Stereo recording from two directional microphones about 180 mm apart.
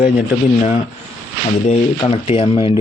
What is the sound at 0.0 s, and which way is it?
Speech, 50° left (ahead or behind).